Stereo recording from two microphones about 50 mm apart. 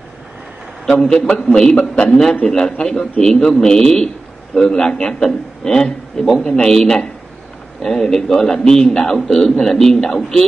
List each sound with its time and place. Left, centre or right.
0.8 s a man's voice: centre